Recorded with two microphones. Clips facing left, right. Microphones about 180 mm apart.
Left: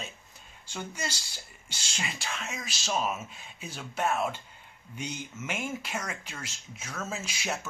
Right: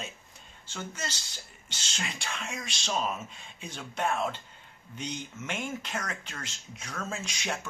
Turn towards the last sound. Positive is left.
turn(degrees=5)  # may be behind; listen again after turning